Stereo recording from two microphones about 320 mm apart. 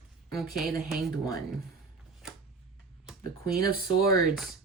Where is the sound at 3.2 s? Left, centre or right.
Right.